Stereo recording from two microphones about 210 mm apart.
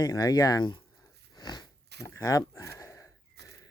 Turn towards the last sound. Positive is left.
turn(degrees=-50)  # may be behind; listen again after turning